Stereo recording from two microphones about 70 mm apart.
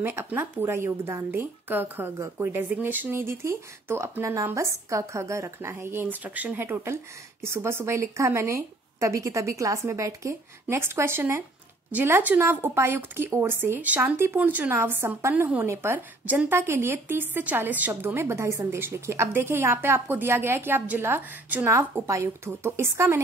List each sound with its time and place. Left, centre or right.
0.0 s a woman's voice: right
11.9 s speech: right
12.4 s a woman's voice: right
22.0 s a woman's voice: right